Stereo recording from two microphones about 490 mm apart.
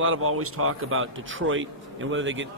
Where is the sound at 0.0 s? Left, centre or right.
Right.